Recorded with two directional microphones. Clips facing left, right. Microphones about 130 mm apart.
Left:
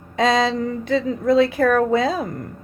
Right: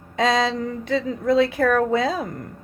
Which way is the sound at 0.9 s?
45° left (ahead or behind).